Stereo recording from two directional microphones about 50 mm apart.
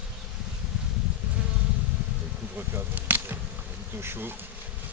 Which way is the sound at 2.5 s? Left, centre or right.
Right.